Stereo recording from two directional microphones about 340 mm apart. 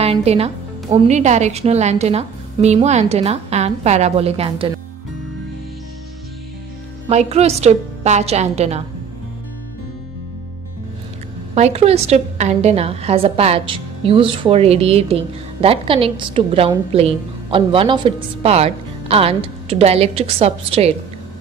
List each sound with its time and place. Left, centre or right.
0.0 s a woman's voice: centre
7.1 s a woman's voice: centre
11.5 s a woman's voice: centre